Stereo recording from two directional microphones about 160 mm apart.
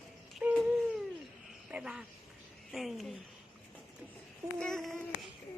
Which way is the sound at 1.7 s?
5° right (ahead or behind).